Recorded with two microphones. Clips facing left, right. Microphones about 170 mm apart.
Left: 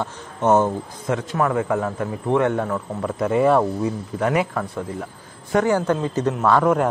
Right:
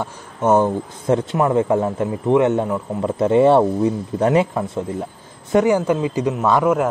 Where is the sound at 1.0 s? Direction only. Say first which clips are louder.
Right 4 dB; 25° right (ahead or behind).